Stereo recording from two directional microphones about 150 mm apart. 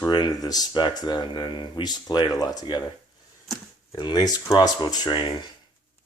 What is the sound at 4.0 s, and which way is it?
Speech, 30° left (ahead or behind).